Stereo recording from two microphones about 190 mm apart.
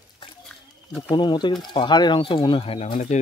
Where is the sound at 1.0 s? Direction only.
25° left (ahead or behind).